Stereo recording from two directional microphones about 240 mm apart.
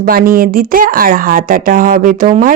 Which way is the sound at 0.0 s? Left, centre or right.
Right.